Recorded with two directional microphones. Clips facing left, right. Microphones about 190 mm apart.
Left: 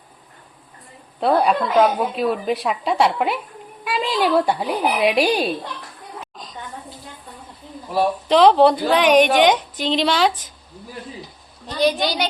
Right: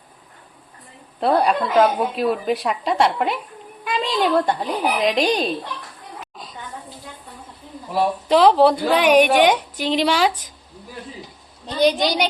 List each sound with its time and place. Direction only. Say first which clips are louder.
1.2 s a woman's voice: left 1 dB; centre (ahead or behind)
6.3 s a sound: even; 5° right (ahead or behind)
8.3 s a woman's voice: left 1 dB; 5° right (ahead or behind)
11.8 s a woman's voice: right 2 dB; 20° right (ahead or behind)